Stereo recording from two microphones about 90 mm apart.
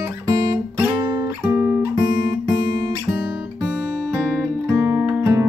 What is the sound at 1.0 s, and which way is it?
Music, 45° right (ahead or behind).